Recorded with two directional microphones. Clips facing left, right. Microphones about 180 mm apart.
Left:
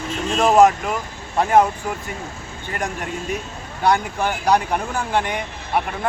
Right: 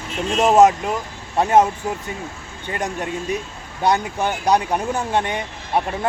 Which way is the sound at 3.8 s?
20° right (ahead or behind).